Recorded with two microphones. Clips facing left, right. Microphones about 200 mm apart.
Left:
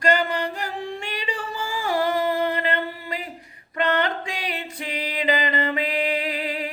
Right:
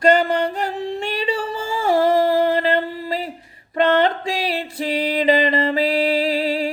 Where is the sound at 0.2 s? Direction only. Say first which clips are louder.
Right 6 dB; 30° right (ahead or behind).